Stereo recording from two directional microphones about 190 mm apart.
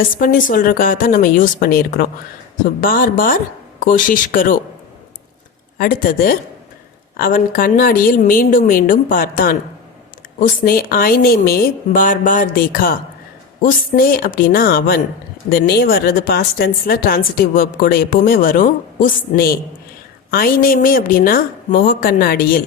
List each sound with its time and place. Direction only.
0.1 s a woman's voice: 45° left (ahead or behind)
5.7 s a woman's voice: 50° left (ahead or behind)
10.6 s a woman's voice: 50° left (ahead or behind)